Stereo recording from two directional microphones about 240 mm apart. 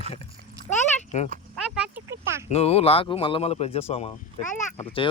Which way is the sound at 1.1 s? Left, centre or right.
Left.